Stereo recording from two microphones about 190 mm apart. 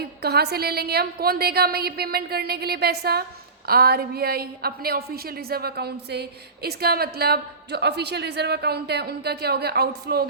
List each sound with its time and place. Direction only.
0.0 s a woman's voice: 55° right (ahead or behind)